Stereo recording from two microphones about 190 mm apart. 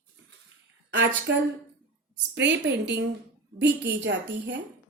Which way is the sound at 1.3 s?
65° right (ahead or behind).